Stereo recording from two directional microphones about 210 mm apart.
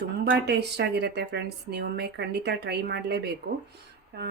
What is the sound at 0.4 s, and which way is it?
A woman's voice, 50° right (ahead or behind).